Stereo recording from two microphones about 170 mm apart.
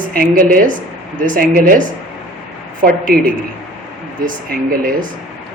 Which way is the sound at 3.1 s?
60° right (ahead or behind).